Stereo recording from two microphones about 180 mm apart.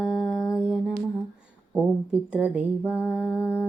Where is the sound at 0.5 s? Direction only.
5° right (ahead or behind).